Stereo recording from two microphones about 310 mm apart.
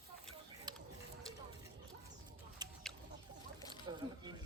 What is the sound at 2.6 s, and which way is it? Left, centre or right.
Chicken, centre.